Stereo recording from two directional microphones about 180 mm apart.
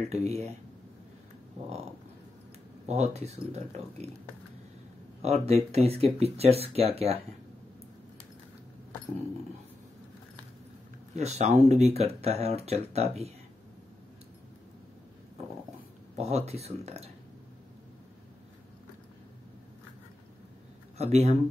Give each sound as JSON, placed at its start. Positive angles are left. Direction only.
{"t": 0.1, "sound": "speech", "side_deg": -35}
{"t": 2.9, "sound": "speech", "side_deg": -40}
{"t": 5.2, "sound": "speech", "side_deg": -35}
{"t": 11.1, "sound": "speech", "side_deg": -40}
{"t": 16.2, "sound": "speech", "side_deg": -35}
{"t": 21.0, "sound": "speech", "side_deg": -35}